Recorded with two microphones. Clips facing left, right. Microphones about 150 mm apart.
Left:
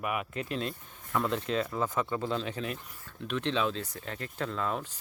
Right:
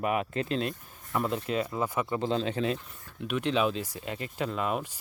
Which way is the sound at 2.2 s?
25° right (ahead or behind).